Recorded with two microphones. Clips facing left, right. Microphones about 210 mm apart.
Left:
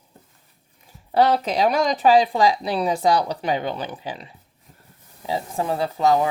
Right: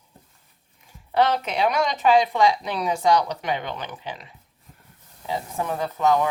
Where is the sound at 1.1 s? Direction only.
35° left (ahead or behind).